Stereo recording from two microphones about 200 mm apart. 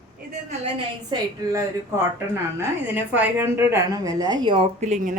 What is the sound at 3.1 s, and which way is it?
A woman's voice, 10° right (ahead or behind).